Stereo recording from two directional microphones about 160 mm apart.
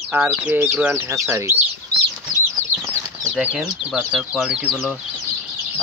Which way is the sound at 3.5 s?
5° right (ahead or behind).